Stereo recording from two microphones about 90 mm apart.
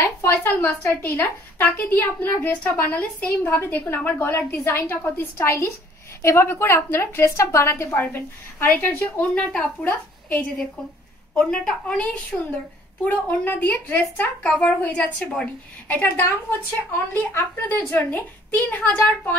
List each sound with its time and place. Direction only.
0.0 s a woman's voice: 30° left (ahead or behind)
11.3 s a woman's voice: 10° left (ahead or behind)
15.9 s speech: 25° left (ahead or behind)